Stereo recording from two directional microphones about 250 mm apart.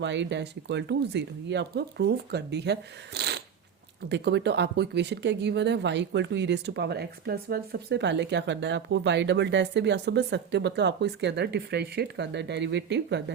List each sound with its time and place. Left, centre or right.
0.0 s speech: right